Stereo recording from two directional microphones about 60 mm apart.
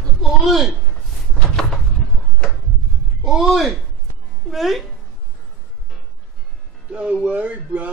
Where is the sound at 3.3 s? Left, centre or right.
Centre.